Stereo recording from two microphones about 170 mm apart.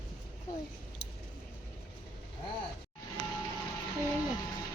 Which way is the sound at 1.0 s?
40° left (ahead or behind).